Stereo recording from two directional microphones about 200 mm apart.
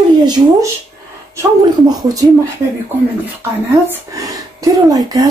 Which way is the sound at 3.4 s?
10° right (ahead or behind).